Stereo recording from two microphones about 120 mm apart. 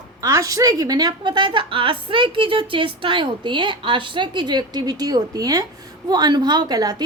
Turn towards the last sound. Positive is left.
turn(degrees=-35)  # may be behind; listen again after turning